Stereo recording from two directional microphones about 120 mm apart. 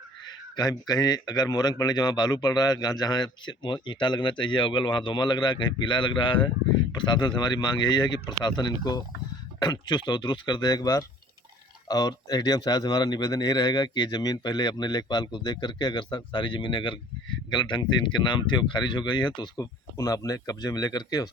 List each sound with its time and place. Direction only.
0.3 s speech: 35° left (ahead or behind)